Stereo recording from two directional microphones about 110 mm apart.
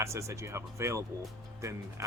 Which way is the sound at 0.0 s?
25° right (ahead or behind).